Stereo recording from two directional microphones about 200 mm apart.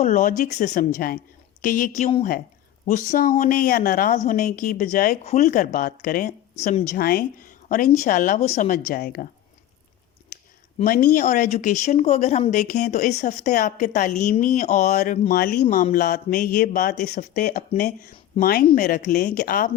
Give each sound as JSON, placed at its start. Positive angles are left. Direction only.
{"t": 0.0, "sound": "speech", "side_deg": 40}
{"t": 0.6, "sound": "speech", "side_deg": 35}
{"t": 0.9, "sound": "speech", "side_deg": 50}
{"t": 2.0, "sound": "speech", "side_deg": 25}
{"t": 2.8, "sound": "speech", "side_deg": 45}
{"t": 6.9, "sound": "speech", "side_deg": 50}
{"t": 10.8, "sound": "speech", "side_deg": 45}